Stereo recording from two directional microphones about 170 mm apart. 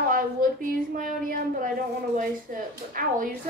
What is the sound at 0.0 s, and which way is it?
Speech, 55° right (ahead or behind).